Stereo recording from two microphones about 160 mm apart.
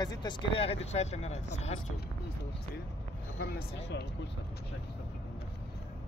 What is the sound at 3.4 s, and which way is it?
Speech, 90° left.